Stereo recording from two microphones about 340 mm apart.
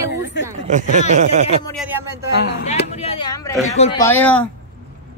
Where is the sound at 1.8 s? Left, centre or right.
Centre.